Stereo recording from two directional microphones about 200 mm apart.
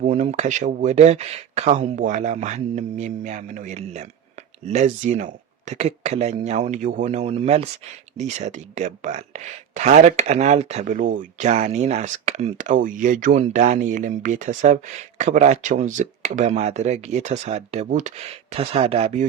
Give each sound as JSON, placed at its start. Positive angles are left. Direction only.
{"t": 0.0, "sound": "speech", "side_deg": -35}